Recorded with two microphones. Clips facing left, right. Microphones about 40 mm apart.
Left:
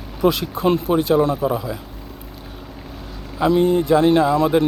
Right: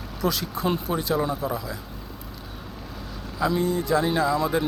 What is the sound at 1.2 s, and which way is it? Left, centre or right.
Speech, left.